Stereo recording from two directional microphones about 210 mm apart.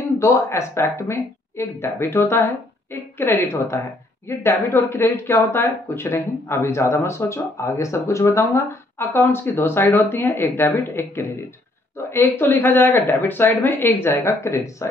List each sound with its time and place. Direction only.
0.2 s speech: 15° left (ahead or behind)